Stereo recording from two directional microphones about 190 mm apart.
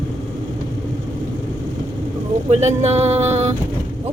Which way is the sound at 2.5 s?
35° right (ahead or behind).